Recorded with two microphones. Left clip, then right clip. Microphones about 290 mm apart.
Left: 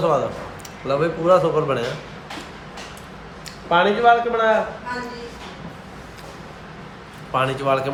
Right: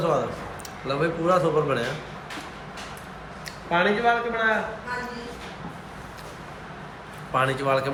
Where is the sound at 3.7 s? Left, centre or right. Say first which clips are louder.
Left 6 dB; centre.